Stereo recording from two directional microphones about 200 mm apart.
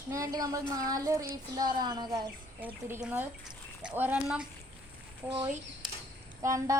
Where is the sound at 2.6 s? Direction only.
10° right (ahead or behind).